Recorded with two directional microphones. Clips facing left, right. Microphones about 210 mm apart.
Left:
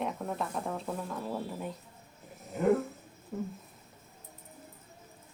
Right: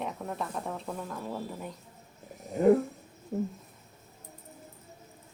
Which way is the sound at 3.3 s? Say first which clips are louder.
Right 5 dB; 30° right (ahead or behind).